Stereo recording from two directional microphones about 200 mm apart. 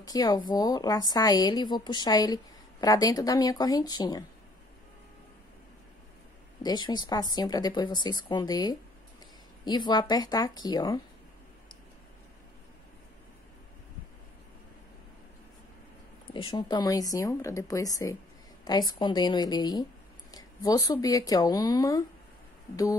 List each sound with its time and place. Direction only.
0.0 s speech: 20° left (ahead or behind)
6.6 s speech: 20° left (ahead or behind)
16.3 s speech: 25° left (ahead or behind)